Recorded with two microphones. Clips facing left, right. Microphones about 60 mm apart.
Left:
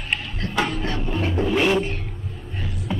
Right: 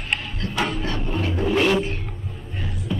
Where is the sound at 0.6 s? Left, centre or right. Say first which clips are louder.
Left 1 dB; centre.